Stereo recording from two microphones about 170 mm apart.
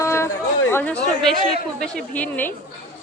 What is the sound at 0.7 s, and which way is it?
Speech, 10° left (ahead or behind).